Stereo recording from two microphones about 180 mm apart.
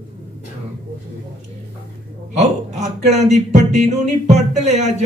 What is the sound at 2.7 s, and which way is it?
Music, 40° right (ahead or behind).